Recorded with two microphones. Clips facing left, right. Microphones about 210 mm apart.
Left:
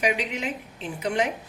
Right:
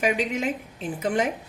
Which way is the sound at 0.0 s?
45° right (ahead or behind).